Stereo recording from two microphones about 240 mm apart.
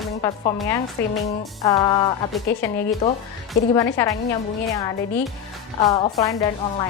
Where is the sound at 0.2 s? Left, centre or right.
Centre.